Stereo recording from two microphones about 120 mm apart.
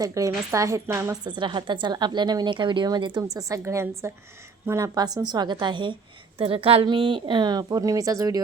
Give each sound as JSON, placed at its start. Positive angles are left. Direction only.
{"t": 0.0, "sound": "a woman's voice", "side_deg": -25}
{"t": 1.2, "sound": "a woman's voice", "side_deg": -40}
{"t": 3.3, "sound": "a woman's voice", "side_deg": -25}